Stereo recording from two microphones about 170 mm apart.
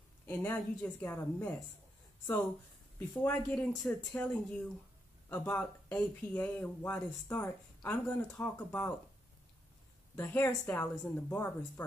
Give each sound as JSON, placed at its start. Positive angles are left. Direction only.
{"t": 0.3, "sound": "speech", "side_deg": 10}
{"t": 3.1, "sound": "speech", "side_deg": 10}
{"t": 10.1, "sound": "speech", "side_deg": 10}